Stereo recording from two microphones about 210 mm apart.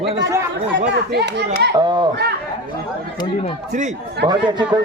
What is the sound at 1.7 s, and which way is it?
Speech, 20° right (ahead or behind).